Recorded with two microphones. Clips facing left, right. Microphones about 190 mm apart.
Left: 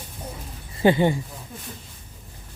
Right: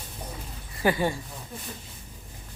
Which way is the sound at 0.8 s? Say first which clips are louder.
Left 6 dB; 25° left (ahead or behind).